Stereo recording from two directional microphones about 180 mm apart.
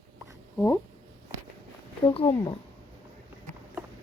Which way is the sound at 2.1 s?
20° left (ahead or behind).